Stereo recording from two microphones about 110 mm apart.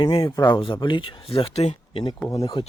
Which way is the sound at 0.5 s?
50° left (ahead or behind).